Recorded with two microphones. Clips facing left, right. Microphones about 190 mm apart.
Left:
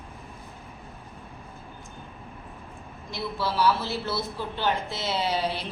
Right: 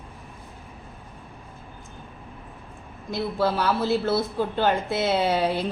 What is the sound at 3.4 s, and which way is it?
Speech, 55° right (ahead or behind).